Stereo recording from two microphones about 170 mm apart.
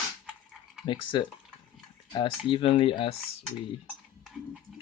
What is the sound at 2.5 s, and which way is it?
Speech, 30° left (ahead or behind).